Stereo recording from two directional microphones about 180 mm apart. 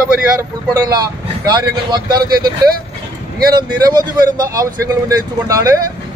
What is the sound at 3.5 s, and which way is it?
A man's voice, 20° right (ahead or behind).